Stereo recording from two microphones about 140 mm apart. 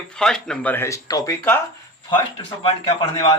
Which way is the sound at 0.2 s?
5° left (ahead or behind).